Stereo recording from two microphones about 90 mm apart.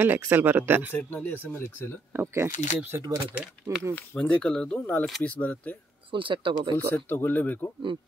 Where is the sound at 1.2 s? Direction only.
10° left (ahead or behind).